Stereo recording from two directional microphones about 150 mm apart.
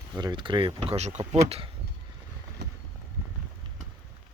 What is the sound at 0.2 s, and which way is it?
Speech, 30° right (ahead or behind).